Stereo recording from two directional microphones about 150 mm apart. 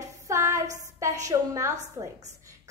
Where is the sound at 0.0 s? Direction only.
20° right (ahead or behind).